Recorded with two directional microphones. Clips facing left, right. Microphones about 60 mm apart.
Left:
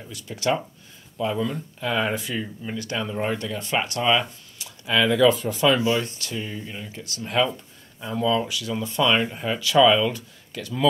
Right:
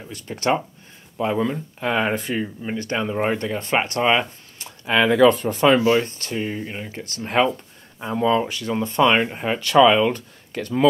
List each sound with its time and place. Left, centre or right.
0.1 s speech: right